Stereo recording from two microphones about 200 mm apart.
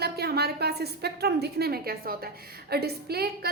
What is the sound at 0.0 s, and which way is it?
A woman's voice, 50° right (ahead or behind).